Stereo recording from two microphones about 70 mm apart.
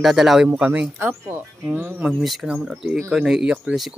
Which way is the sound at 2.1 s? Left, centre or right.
Centre.